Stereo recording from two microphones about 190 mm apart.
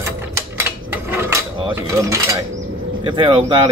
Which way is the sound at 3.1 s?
25° right (ahead or behind).